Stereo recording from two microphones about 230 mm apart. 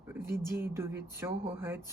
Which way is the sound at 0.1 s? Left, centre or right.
Centre.